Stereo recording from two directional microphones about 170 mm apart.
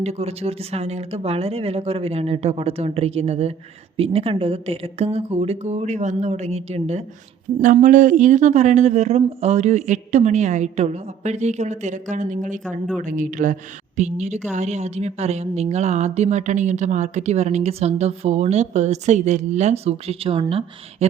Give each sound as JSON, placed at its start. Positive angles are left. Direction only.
{"t": 0.0, "sound": "a woman's voice", "side_deg": -40}
{"t": 7.6, "sound": "a woman's voice", "side_deg": -50}